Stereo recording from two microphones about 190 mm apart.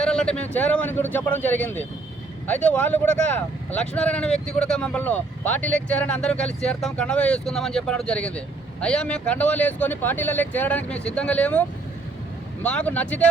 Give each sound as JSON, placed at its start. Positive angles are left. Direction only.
{"t": 0.0, "sound": "speech", "side_deg": 5}
{"t": 12.6, "sound": "speech", "side_deg": 5}